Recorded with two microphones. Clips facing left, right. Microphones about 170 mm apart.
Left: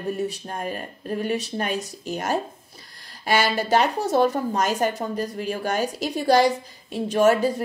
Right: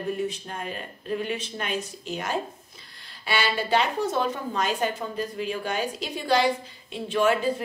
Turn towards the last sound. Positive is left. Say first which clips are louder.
# left 5 dB
turn(degrees=40)  # may be behind; listen again after turning